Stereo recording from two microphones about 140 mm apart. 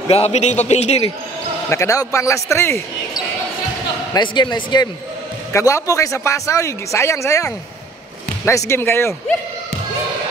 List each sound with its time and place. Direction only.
0.1 s a man's voice: 50° left (ahead or behind)
1.7 s a man's voice: 20° left (ahead or behind)
4.1 s speech: 35° left (ahead or behind)
5.5 s a man's voice: 20° left (ahead or behind)
8.5 s a man's voice: 20° left (ahead or behind)